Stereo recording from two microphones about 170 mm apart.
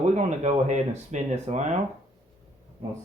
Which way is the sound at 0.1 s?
40° right (ahead or behind).